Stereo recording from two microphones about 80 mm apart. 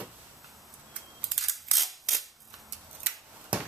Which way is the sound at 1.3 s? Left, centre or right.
Centre.